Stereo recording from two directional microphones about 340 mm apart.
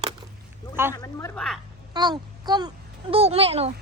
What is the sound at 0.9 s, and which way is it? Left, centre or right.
Speech, centre.